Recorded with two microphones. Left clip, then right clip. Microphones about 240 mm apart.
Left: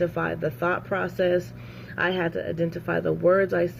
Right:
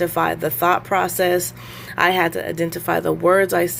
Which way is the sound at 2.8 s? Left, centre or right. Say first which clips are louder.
Right 5 dB; right.